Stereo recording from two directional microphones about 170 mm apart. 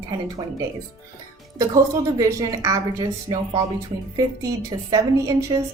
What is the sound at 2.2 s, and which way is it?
A woman's voice, 20° right (ahead or behind).